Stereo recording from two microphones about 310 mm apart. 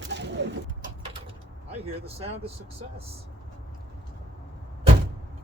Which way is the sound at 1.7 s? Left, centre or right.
Centre.